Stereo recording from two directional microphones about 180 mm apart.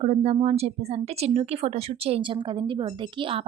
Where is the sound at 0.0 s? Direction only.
35° right (ahead or behind).